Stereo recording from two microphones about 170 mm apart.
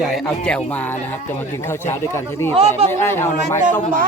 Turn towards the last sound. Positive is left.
turn(degrees=15)  # may be behind; listen again after turning